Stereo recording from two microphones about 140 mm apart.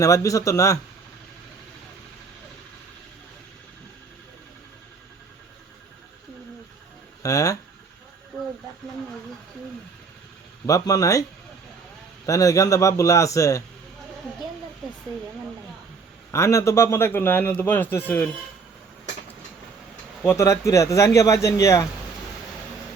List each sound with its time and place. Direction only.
0.0 s a man's voice: 25° left (ahead or behind)
7.2 s speech: 25° left (ahead or behind)
10.7 s a man's voice: 25° left (ahead or behind)
16.3 s a man's voice: 20° left (ahead or behind)
20.2 s a man's voice: 20° left (ahead or behind)